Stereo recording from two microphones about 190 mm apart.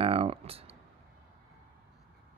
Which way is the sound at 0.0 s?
30° right (ahead or behind).